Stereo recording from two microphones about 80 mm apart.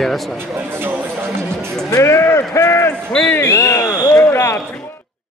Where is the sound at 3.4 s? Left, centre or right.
Left.